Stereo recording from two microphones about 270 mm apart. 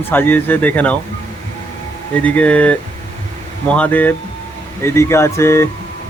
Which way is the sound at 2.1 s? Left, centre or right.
Centre.